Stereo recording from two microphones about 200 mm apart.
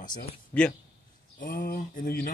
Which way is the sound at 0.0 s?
40° left (ahead or behind).